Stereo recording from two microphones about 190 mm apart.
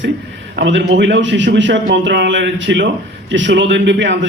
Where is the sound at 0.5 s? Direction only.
70° right (ahead or behind).